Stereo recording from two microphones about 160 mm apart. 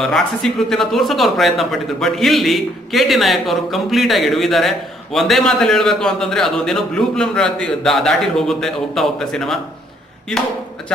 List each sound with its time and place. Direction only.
0.0 s speech: 5° left (ahead or behind)